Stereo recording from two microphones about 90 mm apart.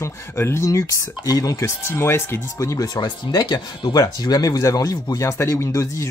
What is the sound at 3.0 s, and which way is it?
Speech, 50° left (ahead or behind).